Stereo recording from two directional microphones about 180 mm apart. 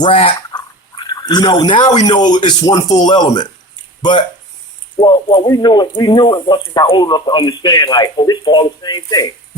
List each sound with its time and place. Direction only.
0.0 s speech: 30° left (ahead or behind)
4.9 s speech: 25° left (ahead or behind)